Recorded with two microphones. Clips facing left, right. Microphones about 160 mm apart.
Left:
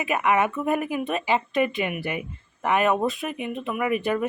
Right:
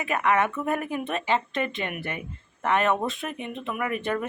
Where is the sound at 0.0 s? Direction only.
15° left (ahead or behind).